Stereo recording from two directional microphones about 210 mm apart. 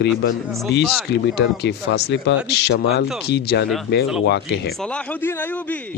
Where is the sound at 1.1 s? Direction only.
55° left (ahead or behind).